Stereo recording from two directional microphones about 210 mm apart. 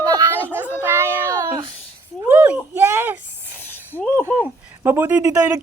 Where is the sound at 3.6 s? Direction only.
10° left (ahead or behind).